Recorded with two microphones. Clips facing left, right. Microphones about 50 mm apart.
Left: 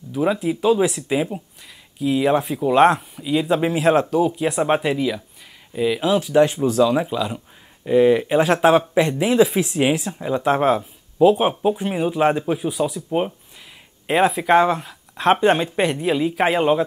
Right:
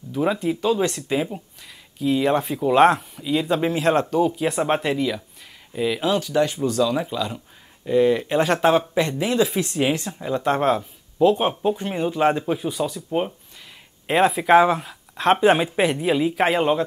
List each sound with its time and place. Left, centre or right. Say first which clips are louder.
0.1 s speech: left 2 dB; centre
6.2 s speech: left 5 dB; centre